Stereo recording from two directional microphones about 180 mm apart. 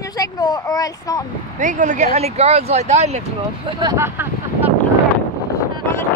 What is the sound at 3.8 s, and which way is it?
Speech, 20° right (ahead or behind).